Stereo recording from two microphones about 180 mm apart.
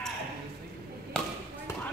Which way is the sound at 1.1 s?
5° left (ahead or behind).